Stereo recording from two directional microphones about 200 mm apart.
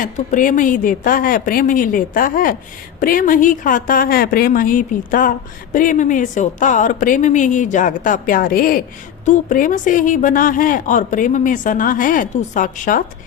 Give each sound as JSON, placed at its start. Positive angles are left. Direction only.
{"t": 0.0, "sound": "a woman's voice", "side_deg": 40}